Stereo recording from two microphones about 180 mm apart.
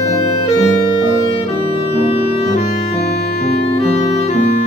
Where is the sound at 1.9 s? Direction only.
35° left (ahead or behind).